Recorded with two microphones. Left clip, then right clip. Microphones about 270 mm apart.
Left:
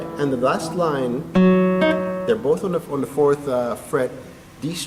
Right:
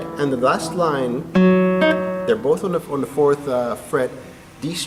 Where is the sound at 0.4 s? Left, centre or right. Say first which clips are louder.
Right 3 dB; centre.